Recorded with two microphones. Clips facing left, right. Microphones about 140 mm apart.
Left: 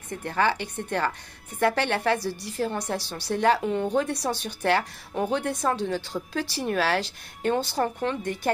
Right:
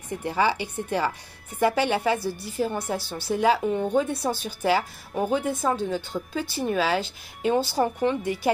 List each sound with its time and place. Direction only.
0.1 s a woman's voice: 10° right (ahead or behind)